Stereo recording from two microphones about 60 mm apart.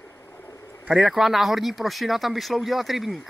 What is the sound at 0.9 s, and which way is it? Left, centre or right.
Speech, centre.